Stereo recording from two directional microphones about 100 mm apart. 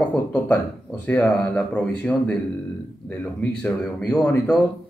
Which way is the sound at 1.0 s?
10° left (ahead or behind).